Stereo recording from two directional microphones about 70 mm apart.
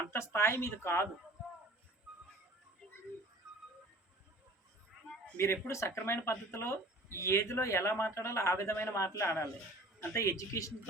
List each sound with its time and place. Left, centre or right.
0.1 s speech: left
5.6 s a man's voice: left